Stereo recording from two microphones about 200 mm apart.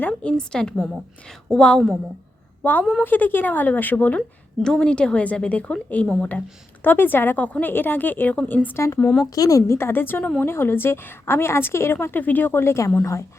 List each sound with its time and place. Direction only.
0.0 s a woman's voice: 5° left (ahead or behind)
9.3 s a woman's voice: 15° left (ahead or behind)